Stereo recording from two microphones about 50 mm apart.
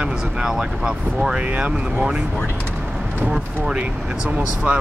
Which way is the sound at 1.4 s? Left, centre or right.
Right.